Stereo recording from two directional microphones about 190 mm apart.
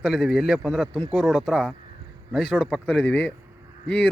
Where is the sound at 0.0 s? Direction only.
Centre (ahead or behind).